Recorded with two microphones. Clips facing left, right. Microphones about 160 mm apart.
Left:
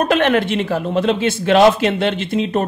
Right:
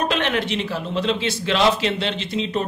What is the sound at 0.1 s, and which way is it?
A man's voice, 50° left (ahead or behind).